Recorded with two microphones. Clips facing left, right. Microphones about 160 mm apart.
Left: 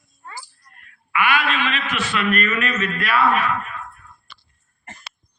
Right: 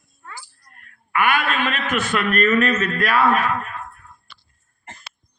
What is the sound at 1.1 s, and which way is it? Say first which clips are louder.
A man's voice: right 1 dB; 45° right (ahead or behind).